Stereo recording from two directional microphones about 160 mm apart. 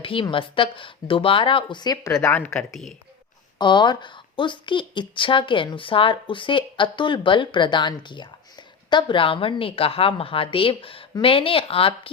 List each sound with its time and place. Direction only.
0.0 s a woman's voice: 35° left (ahead or behind); by 2.9 s 5° left (ahead or behind)
3.6 s a woman's voice: 30° left (ahead or behind)